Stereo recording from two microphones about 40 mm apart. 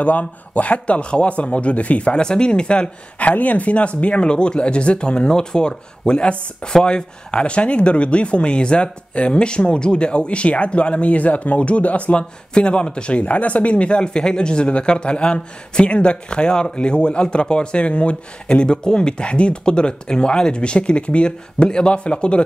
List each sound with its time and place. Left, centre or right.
0.0 s a man's voice: left
2.1 s speech: left
3.2 s speech: left